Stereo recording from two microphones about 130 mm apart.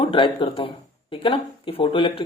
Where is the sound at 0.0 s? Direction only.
40° left (ahead or behind).